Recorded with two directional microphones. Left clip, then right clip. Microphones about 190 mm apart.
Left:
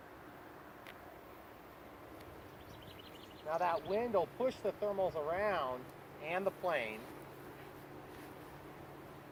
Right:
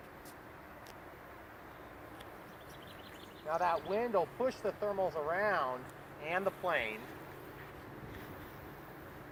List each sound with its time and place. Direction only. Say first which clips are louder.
3.5 s speech: right 2 dB; centre (ahead or behind)
6.7 s speech: right 3 dB; 30° left (ahead or behind)